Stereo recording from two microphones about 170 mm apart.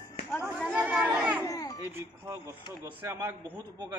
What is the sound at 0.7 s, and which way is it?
Chatter, 5° right (ahead or behind).